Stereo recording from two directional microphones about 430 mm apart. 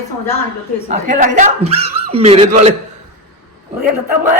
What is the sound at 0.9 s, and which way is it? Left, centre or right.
Speech, centre.